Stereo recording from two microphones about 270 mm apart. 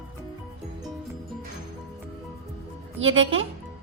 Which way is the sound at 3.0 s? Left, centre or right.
Right.